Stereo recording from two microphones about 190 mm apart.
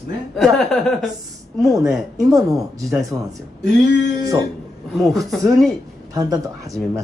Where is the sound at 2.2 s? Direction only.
20° right (ahead or behind).